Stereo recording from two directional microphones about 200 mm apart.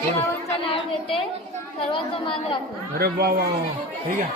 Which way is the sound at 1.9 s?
25° left (ahead or behind).